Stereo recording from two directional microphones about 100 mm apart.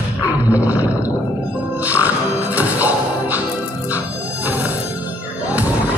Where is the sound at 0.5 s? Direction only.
15° right (ahead or behind).